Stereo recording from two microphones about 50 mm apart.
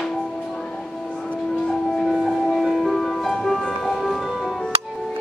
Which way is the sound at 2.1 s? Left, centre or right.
Centre.